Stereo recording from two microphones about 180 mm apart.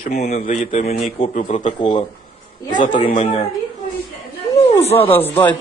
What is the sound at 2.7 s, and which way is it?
Speech, 45° left (ahead or behind).